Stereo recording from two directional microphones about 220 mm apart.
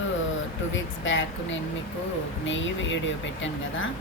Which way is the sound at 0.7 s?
60° left (ahead or behind).